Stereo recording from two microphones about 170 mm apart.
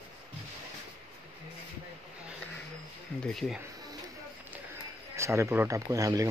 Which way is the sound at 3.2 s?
Centre (ahead or behind).